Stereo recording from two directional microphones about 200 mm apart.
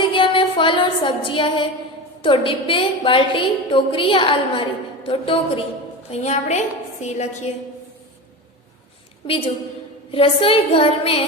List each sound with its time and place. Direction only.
0.0 s music: 25° left (ahead or behind)
2.2 s a woman's voice: 25° left (ahead or behind)
9.2 s a woman's voice: 30° left (ahead or behind)